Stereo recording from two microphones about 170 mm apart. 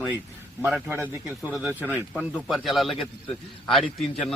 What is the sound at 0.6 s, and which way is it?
A man's voice, 10° right (ahead or behind).